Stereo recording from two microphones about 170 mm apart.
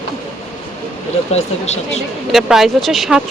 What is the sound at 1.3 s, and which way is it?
Speech, 40° left (ahead or behind).